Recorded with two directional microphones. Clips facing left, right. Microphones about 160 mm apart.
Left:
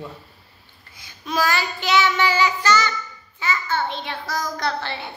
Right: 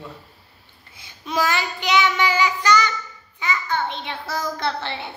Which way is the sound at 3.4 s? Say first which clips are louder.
Even; 15° right (ahead or behind).